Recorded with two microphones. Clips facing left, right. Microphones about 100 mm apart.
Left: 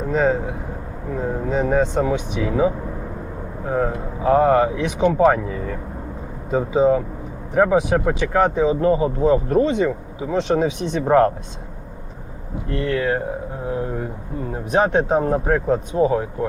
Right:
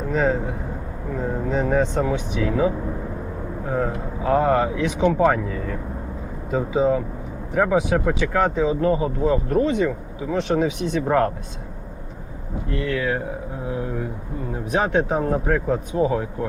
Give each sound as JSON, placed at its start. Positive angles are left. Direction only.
{"t": 0.1, "sound": "speech", "side_deg": 15}
{"t": 4.2, "sound": "speech", "side_deg": 20}
{"t": 6.5, "sound": "speech", "side_deg": 20}
{"t": 12.8, "sound": "speech", "side_deg": 35}
{"t": 14.7, "sound": "speech", "side_deg": 30}